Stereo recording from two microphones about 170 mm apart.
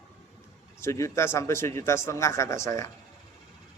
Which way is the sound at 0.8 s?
15° left (ahead or behind).